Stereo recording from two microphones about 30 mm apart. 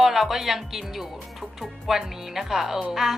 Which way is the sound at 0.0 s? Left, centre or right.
Centre.